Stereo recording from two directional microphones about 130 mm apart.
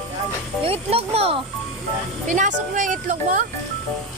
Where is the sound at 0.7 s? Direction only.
50° right (ahead or behind).